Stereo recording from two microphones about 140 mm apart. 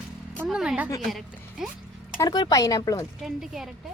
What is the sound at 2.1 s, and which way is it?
Speech, 30° left (ahead or behind).